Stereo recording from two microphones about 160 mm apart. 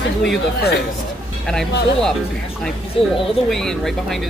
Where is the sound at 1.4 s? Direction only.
5° left (ahead or behind).